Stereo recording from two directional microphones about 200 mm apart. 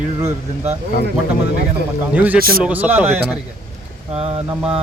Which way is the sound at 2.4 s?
45° right (ahead or behind).